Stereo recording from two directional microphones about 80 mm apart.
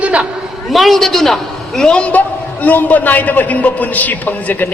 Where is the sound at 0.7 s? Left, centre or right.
Centre.